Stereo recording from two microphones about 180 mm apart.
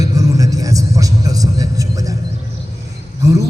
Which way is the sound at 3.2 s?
20° right (ahead or behind).